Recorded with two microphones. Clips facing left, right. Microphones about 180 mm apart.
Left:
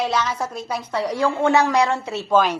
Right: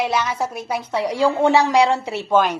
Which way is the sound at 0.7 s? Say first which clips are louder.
Right 1 dB; 25° right (ahead or behind).